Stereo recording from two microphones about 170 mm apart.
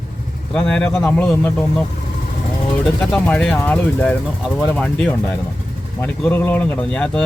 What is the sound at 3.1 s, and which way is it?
Speech, 10° left (ahead or behind).